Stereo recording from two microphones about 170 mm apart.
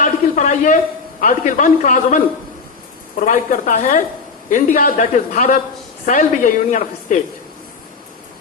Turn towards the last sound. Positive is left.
turn(degrees=50)  # may be behind; listen again after turning